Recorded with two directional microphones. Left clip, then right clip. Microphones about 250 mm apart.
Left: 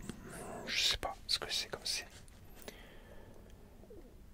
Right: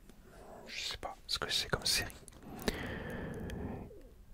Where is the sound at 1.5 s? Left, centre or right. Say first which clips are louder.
Right 4 dB; right.